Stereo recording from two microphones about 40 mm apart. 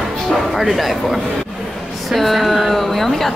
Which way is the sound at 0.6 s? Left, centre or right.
Centre.